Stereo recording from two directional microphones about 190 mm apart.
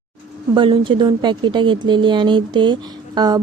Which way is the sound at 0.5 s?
25° right (ahead or behind).